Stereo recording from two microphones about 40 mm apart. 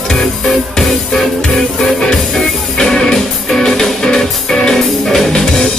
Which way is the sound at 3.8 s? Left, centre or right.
Centre.